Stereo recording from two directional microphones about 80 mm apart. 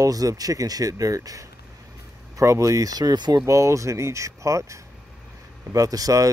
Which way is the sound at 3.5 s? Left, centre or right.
Right.